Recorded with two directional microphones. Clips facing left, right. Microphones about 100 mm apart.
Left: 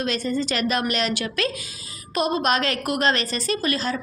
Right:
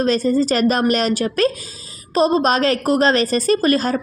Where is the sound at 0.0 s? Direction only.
40° right (ahead or behind).